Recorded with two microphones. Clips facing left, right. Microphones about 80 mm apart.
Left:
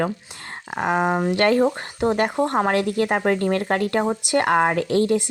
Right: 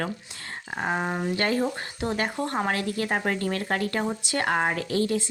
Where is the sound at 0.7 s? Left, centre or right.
Left.